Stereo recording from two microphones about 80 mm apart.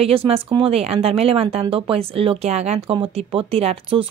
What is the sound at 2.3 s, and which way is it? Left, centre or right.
Speech, right.